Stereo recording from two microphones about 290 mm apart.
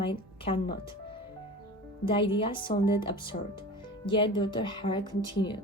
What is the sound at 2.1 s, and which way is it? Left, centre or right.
Speech, centre.